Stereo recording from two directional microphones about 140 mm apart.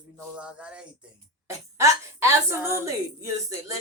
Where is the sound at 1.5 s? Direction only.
20° right (ahead or behind).